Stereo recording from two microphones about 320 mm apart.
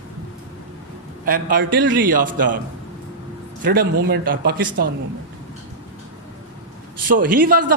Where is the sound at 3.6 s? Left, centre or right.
Right.